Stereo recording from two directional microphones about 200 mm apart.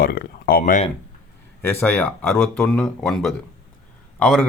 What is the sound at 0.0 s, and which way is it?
Speech, 50° left (ahead or behind).